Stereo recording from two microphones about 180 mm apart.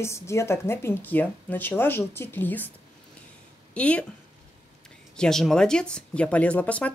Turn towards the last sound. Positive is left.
turn(degrees=10)  # may be behind; listen again after turning